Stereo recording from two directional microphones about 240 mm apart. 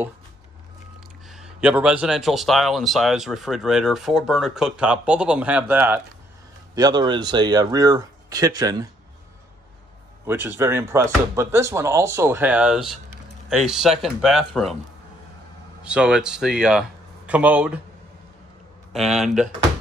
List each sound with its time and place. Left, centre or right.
1.3 s speech: centre
6.7 s speech: centre
10.2 s speech: centre
15.8 s speech: centre
18.9 s speech: centre